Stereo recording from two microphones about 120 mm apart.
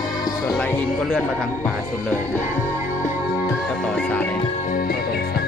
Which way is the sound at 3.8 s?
10° left (ahead or behind).